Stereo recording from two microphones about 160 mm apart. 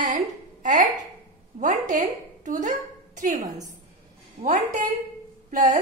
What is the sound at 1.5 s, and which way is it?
A woman's voice, 50° right (ahead or behind).